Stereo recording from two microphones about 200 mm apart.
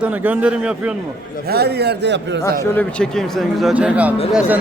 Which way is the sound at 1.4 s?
55° right (ahead or behind).